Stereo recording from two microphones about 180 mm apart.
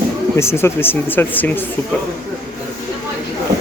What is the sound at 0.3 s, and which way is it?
Speech, 15° left (ahead or behind).